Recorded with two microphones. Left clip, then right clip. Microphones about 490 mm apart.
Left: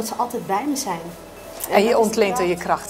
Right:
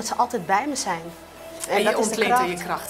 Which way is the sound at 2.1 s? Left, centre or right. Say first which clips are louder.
Left 1 dB; left.